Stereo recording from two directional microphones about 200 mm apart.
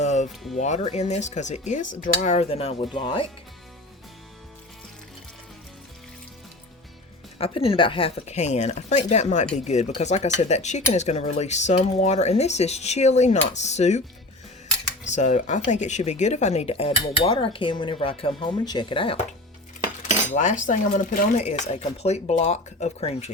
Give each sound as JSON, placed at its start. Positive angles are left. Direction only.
{"t": 0.0, "sound": "music", "side_deg": 35}
{"t": 0.6, "sound": "speech", "side_deg": 35}
{"t": 7.3, "sound": "speech", "side_deg": 30}
{"t": 15.0, "sound": "speech", "side_deg": 35}
{"t": 20.3, "sound": "speech", "side_deg": 35}